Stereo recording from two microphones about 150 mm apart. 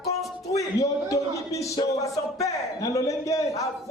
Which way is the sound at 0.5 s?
20° left (ahead or behind).